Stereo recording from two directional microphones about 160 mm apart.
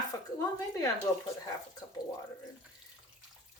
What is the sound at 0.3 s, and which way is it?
Speech, 20° left (ahead or behind).